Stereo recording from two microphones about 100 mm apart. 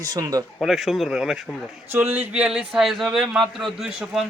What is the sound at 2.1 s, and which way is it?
A man's voice, 15° right (ahead or behind).